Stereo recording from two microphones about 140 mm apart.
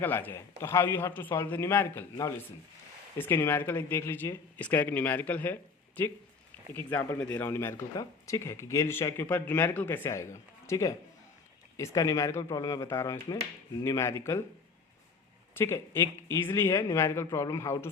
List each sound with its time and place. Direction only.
0.0 s speech: 15° left (ahead or behind)
3.2 s speech: 15° left (ahead or behind)
6.7 s speech: 15° left (ahead or behind)
15.5 s speech: 15° left (ahead or behind)